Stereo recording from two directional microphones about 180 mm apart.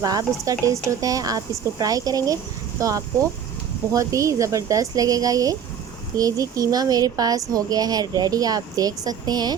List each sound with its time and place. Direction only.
0.0 s speech: 20° right (ahead or behind)